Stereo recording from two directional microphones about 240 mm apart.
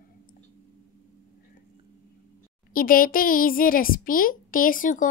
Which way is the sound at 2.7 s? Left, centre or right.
Left.